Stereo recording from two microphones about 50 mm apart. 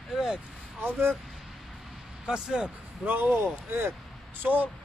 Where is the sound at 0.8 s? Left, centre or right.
Right.